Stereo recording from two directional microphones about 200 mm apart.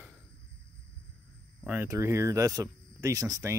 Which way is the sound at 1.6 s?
10° right (ahead or behind).